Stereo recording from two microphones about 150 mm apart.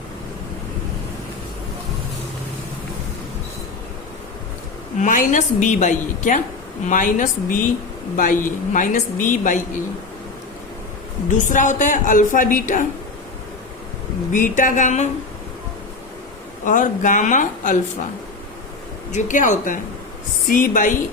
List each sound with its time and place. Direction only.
4.9 s a woman's voice: 60° left (ahead or behind)
11.3 s a woman's voice: 60° left (ahead or behind)
14.3 s a woman's voice: 60° left (ahead or behind)
16.6 s a woman's voice: 60° left (ahead or behind)
19.1 s a woman's voice: 55° left (ahead or behind)